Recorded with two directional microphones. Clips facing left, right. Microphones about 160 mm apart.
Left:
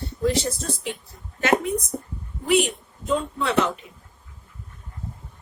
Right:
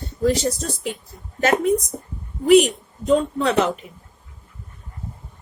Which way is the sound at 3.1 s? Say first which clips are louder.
Right 6 dB; 40° right (ahead or behind).